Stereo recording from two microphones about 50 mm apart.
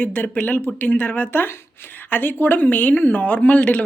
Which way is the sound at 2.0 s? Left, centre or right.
Left.